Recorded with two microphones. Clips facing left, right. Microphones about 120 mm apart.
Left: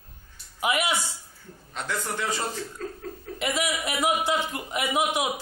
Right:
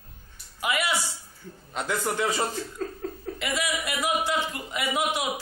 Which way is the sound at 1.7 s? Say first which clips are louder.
Right 3 dB; 15° right (ahead or behind).